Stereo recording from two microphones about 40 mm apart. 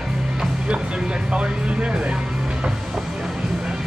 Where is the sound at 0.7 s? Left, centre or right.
Right.